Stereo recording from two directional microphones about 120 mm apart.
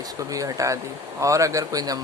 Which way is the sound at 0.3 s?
30° right (ahead or behind).